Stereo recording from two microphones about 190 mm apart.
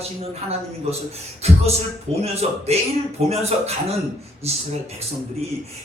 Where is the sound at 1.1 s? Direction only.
35° right (ahead or behind).